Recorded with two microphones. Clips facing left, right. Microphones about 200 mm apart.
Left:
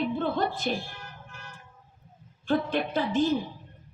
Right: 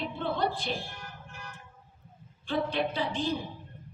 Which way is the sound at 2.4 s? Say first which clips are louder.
Left 3 dB; 45° left (ahead or behind).